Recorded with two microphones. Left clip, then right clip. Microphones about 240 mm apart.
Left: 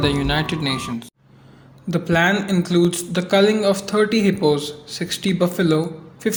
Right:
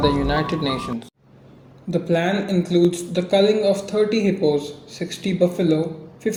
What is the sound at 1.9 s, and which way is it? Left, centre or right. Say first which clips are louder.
A man's voice: left 3 dB; left.